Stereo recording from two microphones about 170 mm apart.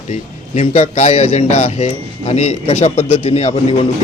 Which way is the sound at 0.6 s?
45° left (ahead or behind).